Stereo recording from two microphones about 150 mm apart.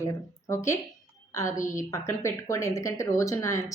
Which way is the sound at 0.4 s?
20° left (ahead or behind).